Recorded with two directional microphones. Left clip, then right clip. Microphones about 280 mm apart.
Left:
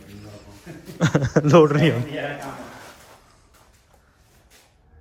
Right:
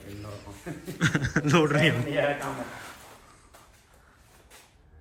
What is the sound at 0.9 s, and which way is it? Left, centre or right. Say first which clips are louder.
A man's voice: left 6 dB; left.